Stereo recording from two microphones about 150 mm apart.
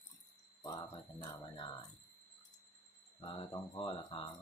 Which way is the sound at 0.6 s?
25° left (ahead or behind).